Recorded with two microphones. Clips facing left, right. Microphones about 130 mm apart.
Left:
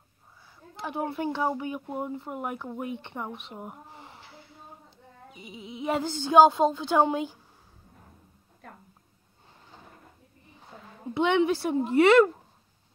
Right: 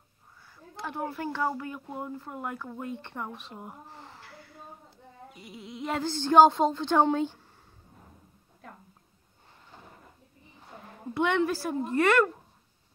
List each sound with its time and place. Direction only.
0.7 s speech: 15° left (ahead or behind)
11.1 s speech: 15° left (ahead or behind)